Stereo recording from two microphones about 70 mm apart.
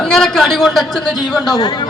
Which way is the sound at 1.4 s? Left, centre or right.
Left.